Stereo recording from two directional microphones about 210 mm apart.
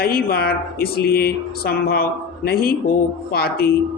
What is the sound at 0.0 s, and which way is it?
Speech, 45° left (ahead or behind).